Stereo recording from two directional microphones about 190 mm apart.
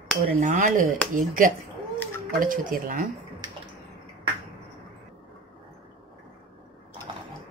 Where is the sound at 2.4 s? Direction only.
45° right (ahead or behind).